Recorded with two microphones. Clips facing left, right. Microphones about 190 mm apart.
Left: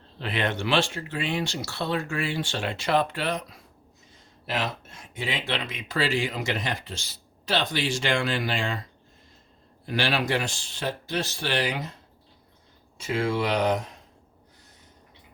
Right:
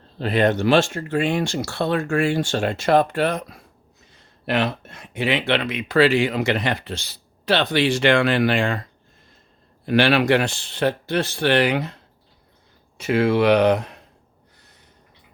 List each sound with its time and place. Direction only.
0.2 s speech: 40° right (ahead or behind)
4.1 s speech: 65° right (ahead or behind)
9.8 s speech: 65° right (ahead or behind)
13.0 s speech: 65° right (ahead or behind)